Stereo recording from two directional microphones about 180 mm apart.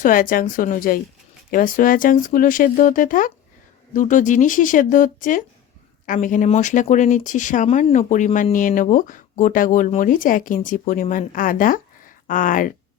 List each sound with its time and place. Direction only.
0.0 s speech: 50° left (ahead or behind)